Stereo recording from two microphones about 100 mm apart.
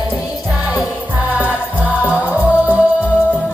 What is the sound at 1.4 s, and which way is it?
Music, 15° right (ahead or behind).